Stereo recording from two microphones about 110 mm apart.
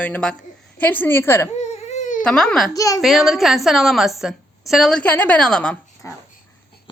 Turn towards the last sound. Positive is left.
turn(degrees=10)  # may be behind; listen again after turning